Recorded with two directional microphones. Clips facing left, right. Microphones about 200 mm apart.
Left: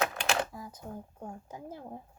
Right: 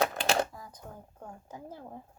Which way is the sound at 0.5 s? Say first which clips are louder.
Left 4 dB; 5° left (ahead or behind).